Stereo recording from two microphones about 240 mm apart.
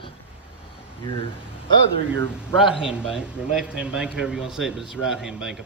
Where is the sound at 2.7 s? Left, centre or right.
Centre.